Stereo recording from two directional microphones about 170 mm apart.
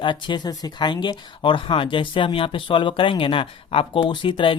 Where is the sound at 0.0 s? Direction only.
25° left (ahead or behind).